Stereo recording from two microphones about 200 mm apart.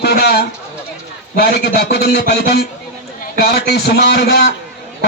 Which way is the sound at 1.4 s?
55° left (ahead or behind).